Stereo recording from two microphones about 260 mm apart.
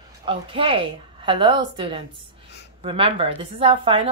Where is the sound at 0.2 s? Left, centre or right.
Centre.